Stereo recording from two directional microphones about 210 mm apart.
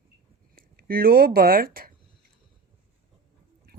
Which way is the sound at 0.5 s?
45° right (ahead or behind).